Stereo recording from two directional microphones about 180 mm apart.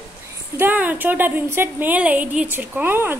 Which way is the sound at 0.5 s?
10° right (ahead or behind).